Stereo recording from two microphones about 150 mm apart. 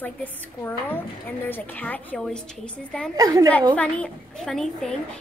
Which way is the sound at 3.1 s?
25° right (ahead or behind).